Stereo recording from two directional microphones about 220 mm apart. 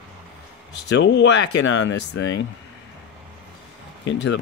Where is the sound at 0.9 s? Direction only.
55° left (ahead or behind).